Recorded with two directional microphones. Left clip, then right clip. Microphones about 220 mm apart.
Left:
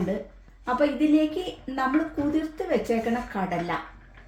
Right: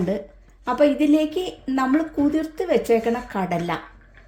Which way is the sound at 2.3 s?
45° right (ahead or behind).